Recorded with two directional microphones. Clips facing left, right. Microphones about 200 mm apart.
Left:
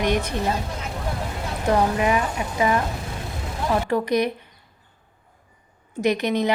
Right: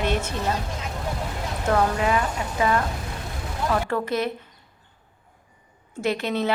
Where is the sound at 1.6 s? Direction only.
15° left (ahead or behind).